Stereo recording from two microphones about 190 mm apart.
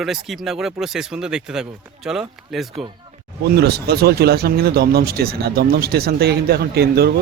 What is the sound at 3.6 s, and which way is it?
Speech, 55° right (ahead or behind).